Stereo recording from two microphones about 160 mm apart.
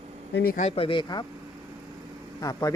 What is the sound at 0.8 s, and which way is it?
Speech, 30° left (ahead or behind).